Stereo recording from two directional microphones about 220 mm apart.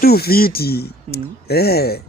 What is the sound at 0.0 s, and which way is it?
Speech, 45° left (ahead or behind).